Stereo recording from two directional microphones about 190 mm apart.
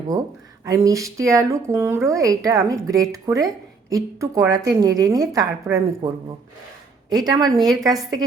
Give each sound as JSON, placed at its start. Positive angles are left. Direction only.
{"t": 0.1, "sound": "a woman's voice", "side_deg": -20}
{"t": 7.3, "sound": "a woman's voice", "side_deg": -20}